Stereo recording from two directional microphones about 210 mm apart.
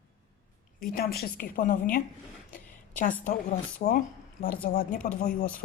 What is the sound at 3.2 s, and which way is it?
Speech, 40° left (ahead or behind).